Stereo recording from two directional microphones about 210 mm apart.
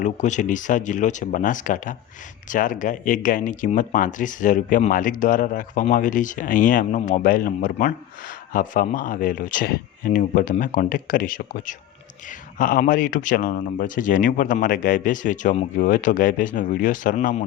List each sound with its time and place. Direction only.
0.0 s speech: 35° left (ahead or behind)